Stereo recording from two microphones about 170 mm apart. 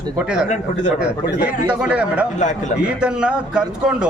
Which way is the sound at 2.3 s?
45° left (ahead or behind).